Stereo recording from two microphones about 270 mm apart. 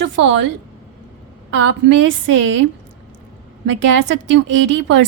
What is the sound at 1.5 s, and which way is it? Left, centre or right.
Speech, right.